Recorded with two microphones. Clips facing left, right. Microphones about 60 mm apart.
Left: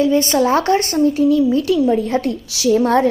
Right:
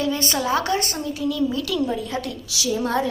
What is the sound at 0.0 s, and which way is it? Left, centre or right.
A woman's voice, left.